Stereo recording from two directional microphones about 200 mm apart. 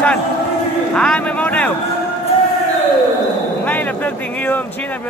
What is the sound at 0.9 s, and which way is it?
Speech, 5° left (ahead or behind).